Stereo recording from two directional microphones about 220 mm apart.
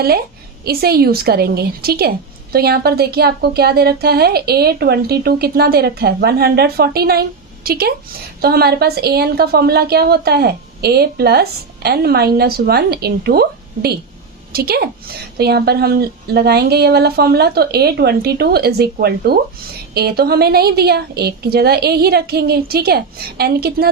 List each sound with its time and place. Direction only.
0.6 s a woman's voice: 45° right (ahead or behind)